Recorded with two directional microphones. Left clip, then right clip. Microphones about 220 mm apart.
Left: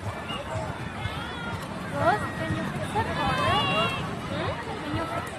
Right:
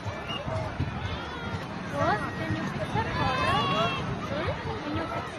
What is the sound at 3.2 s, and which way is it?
Run, 25° left (ahead or behind).